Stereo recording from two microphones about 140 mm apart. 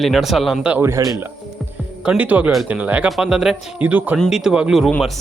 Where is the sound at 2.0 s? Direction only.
10° right (ahead or behind).